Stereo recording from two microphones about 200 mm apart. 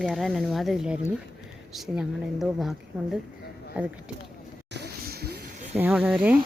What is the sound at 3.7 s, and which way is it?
Speech, 5° right (ahead or behind).